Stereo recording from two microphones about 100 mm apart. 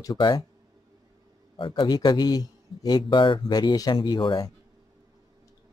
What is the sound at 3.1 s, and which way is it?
Speech, 55° left (ahead or behind).